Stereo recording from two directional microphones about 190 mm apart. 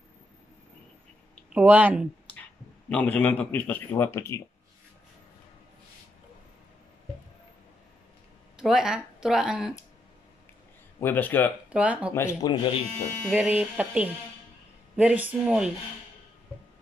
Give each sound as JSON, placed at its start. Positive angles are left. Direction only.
{"t": 1.5, "sound": "speech", "side_deg": -5}
{"t": 2.9, "sound": "speech", "side_deg": 10}
{"t": 8.5, "sound": "speech", "side_deg": -5}
{"t": 11.0, "sound": "speech", "side_deg": 10}
{"t": 11.7, "sound": "speech", "side_deg": -5}
{"t": 12.1, "sound": "speech", "side_deg": 15}
{"t": 13.3, "sound": "speech", "side_deg": -10}